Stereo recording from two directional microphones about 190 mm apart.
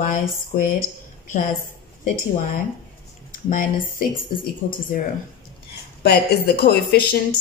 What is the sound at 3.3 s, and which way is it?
A woman's voice, 45° left (ahead or behind).